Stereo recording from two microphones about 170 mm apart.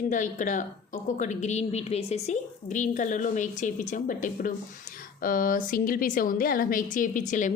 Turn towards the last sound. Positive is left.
turn(degrees=45)  # may be behind; listen again after turning